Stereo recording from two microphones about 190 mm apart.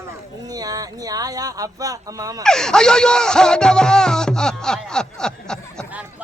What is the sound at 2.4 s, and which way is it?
Speech, 5° left (ahead or behind).